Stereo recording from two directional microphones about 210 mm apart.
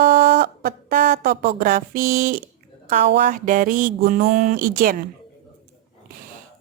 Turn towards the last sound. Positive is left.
turn(degrees=-40)  # may be behind; listen again after turning